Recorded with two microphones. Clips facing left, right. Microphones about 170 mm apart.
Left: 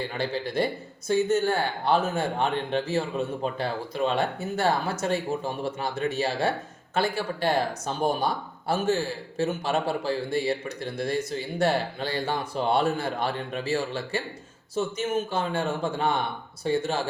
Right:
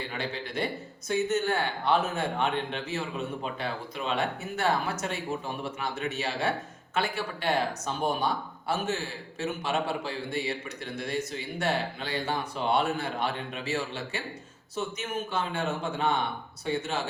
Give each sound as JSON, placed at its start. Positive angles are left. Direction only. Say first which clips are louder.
{"t": 0.2, "sound": "speech", "louder": "left 6 dB", "side_deg": 35}
{"t": 15.3, "sound": "speech", "louder": "left 3 dB", "side_deg": 30}